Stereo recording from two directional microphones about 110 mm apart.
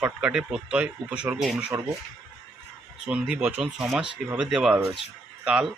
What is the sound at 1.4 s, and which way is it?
Speech, centre (ahead or behind).